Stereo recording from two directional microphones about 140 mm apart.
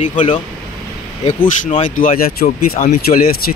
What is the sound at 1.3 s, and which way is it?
Speech, 55° left (ahead or behind).